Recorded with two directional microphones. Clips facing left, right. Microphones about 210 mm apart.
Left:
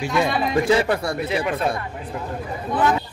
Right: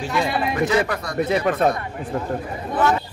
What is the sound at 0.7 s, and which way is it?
Speech, 30° left (ahead or behind).